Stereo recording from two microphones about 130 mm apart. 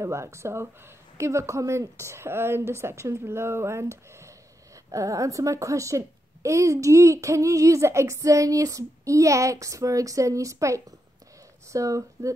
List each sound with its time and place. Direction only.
0.0 s a woman's voice: 20° right (ahead or behind)